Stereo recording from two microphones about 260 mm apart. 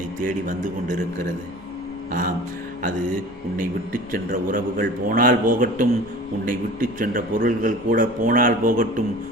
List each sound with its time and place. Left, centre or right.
0.3 s a man's voice: right
4.3 s a man's voice: right